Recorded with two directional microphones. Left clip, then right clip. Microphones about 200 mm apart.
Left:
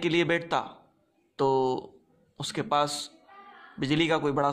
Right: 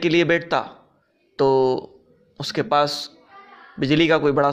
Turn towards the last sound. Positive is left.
turn(degrees=-10)  # may be behind; listen again after turning